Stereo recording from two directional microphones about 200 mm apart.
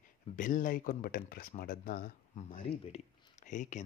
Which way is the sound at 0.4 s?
40° left (ahead or behind).